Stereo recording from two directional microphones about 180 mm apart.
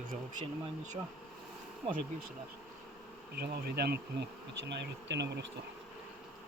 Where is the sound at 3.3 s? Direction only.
60° right (ahead or behind).